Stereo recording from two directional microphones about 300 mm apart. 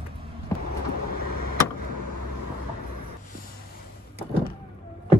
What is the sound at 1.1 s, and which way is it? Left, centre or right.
Vehicle, right.